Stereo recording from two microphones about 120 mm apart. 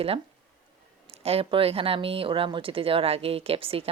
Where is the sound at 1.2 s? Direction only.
55° right (ahead or behind).